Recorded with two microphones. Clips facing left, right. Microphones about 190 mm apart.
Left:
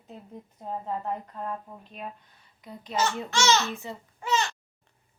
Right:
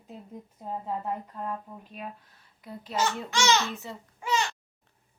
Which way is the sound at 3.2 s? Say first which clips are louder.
Left 1 dB; 15° right (ahead or behind).